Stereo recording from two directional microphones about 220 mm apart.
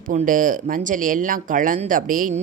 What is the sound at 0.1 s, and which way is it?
Speech, 35° right (ahead or behind).